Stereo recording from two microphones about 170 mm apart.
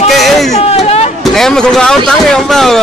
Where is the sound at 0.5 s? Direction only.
40° left (ahead or behind).